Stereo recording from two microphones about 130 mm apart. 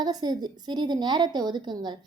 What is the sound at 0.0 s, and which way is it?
A woman's voice, 30° right (ahead or behind).